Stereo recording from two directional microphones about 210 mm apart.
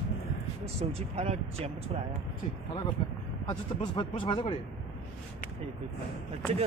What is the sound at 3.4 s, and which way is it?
Speech, 20° left (ahead or behind).